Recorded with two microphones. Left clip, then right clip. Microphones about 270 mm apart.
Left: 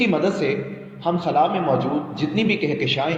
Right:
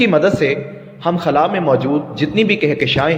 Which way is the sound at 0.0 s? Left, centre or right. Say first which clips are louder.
Right 7 dB; right.